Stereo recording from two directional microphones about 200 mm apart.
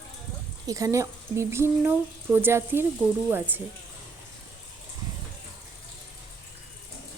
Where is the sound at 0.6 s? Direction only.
15° right (ahead or behind).